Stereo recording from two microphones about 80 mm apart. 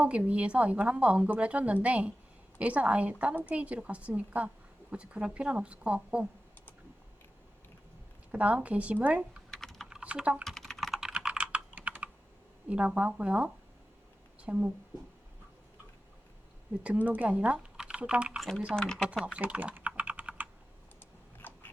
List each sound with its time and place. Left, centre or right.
0.0 s a woman's voice: centre
8.3 s a woman's voice: centre
9.6 s typing: centre
9.9 s typing: centre
10.4 s typing: centre
11.1 s computer keyboard: centre
12.6 s a woman's voice: centre
16.8 s speech: centre
18.3 s speech: centre
19.2 s typing: centre
21.3 s biting: left